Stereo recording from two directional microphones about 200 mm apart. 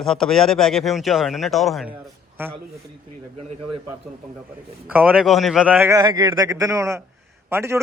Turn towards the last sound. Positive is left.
turn(degrees=-10)  # may be behind; listen again after turning